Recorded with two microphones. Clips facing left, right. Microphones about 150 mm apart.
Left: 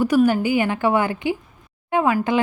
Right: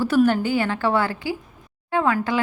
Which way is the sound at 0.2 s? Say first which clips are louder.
Right 2 dB; 5° left (ahead or behind).